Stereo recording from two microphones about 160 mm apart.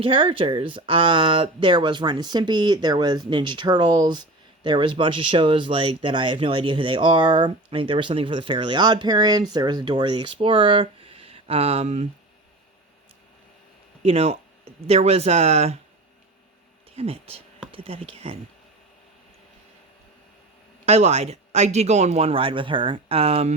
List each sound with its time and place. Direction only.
0.0 s speech: 35° right (ahead or behind)
14.0 s speech: 40° right (ahead or behind)
16.9 s speech: 40° right (ahead or behind)
20.8 s speech: 40° right (ahead or behind)